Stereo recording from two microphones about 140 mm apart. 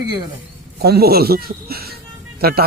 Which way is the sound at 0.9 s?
90° right.